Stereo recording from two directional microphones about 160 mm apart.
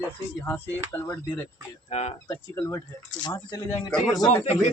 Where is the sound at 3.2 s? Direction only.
25° left (ahead or behind).